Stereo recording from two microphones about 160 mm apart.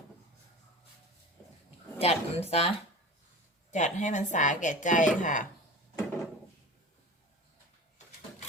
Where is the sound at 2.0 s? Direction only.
40° left (ahead or behind).